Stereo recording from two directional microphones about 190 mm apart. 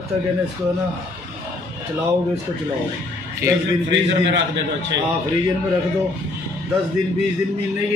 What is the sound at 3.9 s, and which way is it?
A man's voice, 70° right (ahead or behind).